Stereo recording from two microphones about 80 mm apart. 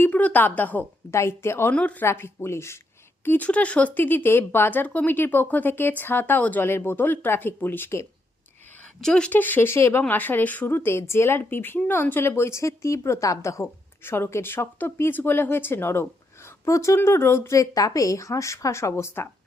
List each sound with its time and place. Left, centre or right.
0.0 s speech: left
1.1 s a woman's voice: left
1.7 s a woman's voice: centre
2.0 s a woman's voice: left
3.2 s speech: left
9.0 s a woman's voice: centre
9.4 s a woman's voice: left